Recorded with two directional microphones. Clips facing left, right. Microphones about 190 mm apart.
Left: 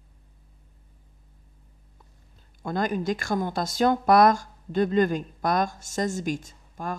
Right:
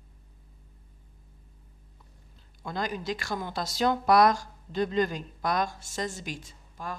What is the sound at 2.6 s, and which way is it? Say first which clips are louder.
A woman's voice: left 6 dB; 50° left (ahead or behind).